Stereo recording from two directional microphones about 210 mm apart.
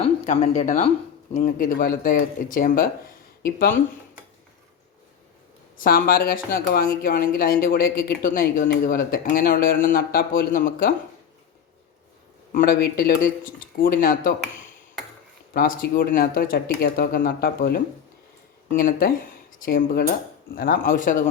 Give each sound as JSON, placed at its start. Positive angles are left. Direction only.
{"t": 0.0, "sound": "speech", "side_deg": 35}
{"t": 5.8, "sound": "speech", "side_deg": 45}
{"t": 12.5, "sound": "speech", "side_deg": 45}
{"t": 15.5, "sound": "speech", "side_deg": 40}